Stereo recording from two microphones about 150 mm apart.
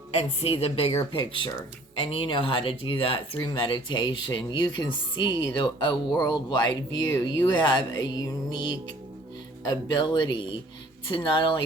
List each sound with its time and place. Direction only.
0.2 s speech: 40° left (ahead or behind)